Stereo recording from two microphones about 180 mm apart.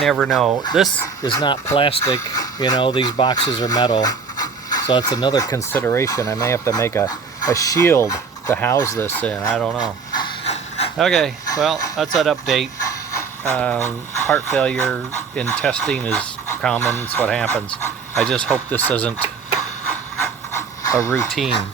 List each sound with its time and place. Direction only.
0.0 s speech: centre (ahead or behind)
1.2 s speech: 20° left (ahead or behind)
2.0 s speech: 20° left (ahead or behind)
9.8 s a sound: 25° left (ahead or behind)
10.4 s a sound: 35° left (ahead or behind)
10.9 s speech: centre (ahead or behind)
12.9 s pant: 15° left (ahead or behind)
14.3 s speech: 10° left (ahead or behind)
18.2 s speech: 5° left (ahead or behind)
19.8 s pant: 10° left (ahead or behind)